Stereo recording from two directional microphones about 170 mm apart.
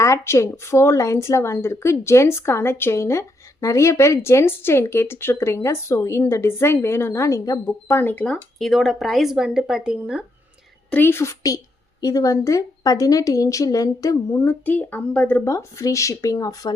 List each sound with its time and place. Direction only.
0.0 s speech: 15° left (ahead or behind); by 10.2 s 5° right (ahead or behind)
10.9 s a woman's voice: 15° left (ahead or behind)